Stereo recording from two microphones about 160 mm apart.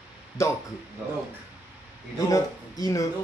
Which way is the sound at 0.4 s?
20° left (ahead or behind).